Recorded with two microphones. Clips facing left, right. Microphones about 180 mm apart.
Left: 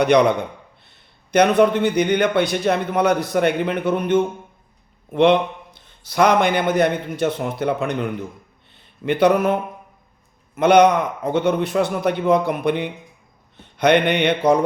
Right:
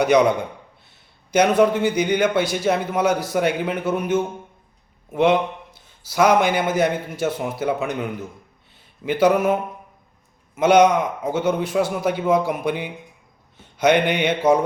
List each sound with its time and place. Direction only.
0.0 s a man's voice: 5° right (ahead or behind)
1.5 s a man's voice: 10° right (ahead or behind)
2.3 s a man's voice: 60° left (ahead or behind)
2.6 s a man's voice: 5° right (ahead or behind)
10.6 s a man's voice: 60° left (ahead or behind)
11.0 s a man's voice: 10° right (ahead or behind)
13.7 s mantra: 60° left (ahead or behind)